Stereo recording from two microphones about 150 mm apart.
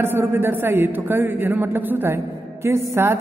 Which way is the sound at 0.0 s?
15° right (ahead or behind).